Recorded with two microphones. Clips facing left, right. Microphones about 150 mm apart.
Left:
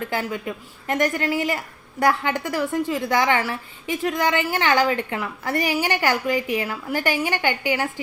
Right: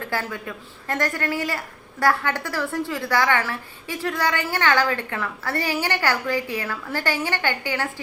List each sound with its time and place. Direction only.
0.1 s a woman's voice: 20° left (ahead or behind)